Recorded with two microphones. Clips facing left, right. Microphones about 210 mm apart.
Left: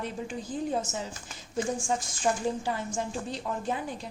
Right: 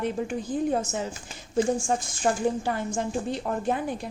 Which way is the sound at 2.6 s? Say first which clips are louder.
Right 4 dB; 55° right (ahead or behind).